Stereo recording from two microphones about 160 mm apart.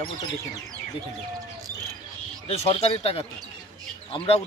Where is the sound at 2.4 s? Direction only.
40° left (ahead or behind).